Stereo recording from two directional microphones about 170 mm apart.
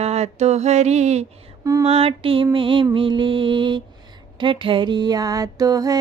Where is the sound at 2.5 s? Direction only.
30° right (ahead or behind).